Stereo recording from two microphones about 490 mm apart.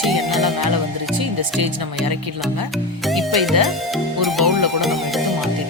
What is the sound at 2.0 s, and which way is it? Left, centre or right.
Speech, right.